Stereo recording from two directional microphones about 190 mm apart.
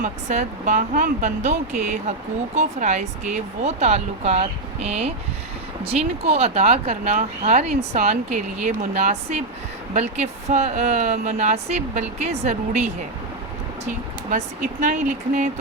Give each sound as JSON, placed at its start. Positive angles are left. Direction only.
{"t": 0.0, "sound": "speech", "side_deg": -40}
{"t": 13.8, "sound": "speech", "side_deg": -40}